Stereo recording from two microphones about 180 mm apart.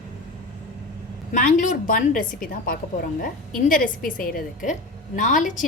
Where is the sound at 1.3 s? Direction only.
45° left (ahead or behind).